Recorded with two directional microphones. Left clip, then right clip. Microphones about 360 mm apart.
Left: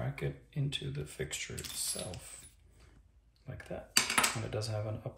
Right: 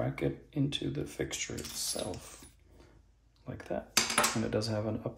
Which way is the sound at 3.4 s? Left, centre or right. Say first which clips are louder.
Right 6 dB; right.